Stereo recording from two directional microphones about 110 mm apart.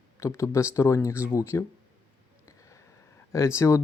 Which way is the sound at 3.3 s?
25° left (ahead or behind).